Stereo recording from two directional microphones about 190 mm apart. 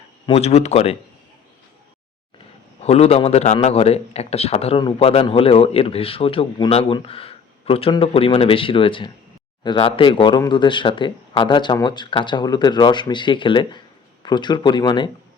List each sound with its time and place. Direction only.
0.3 s a man's voice: 35° left (ahead or behind)
2.8 s a man's voice: 35° left (ahead or behind)